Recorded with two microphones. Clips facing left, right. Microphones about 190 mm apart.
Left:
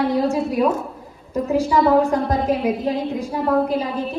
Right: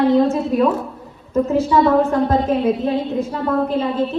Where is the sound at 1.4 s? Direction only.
15° left (ahead or behind).